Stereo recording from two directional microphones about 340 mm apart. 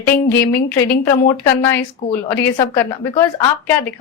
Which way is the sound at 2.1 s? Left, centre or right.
Centre.